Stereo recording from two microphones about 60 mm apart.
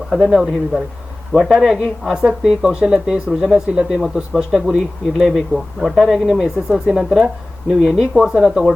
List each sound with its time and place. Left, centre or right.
0.1 s speech: centre
3.8 s speech: centre